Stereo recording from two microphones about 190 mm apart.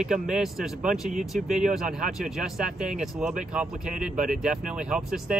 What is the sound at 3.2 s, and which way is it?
Speech, 40° right (ahead or behind).